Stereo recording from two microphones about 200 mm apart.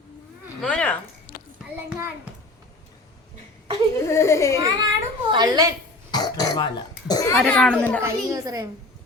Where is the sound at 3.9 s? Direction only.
15° left (ahead or behind).